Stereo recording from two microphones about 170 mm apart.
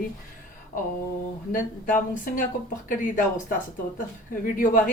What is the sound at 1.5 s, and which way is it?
A woman's voice, 50° left (ahead or behind).